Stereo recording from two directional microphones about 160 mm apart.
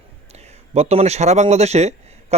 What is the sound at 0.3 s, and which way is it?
A man's voice, 40° right (ahead or behind).